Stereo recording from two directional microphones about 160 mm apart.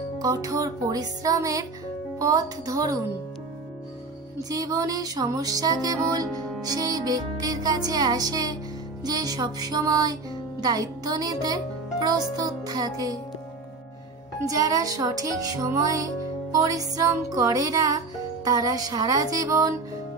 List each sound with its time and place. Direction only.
0.2 s music: 20° right (ahead or behind)
4.4 s music: 25° right (ahead or behind)
14.4 s music: 20° right (ahead or behind)